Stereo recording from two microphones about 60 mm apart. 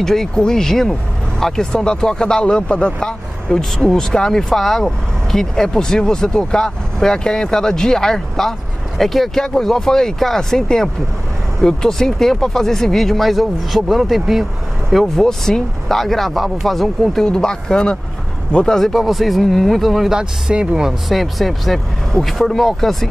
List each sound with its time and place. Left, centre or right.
0.0 s speech: centre
18.8 s speech: centre
20.2 s speech: centre
21.1 s speech: centre